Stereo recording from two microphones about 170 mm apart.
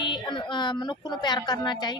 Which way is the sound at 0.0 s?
25° left (ahead or behind).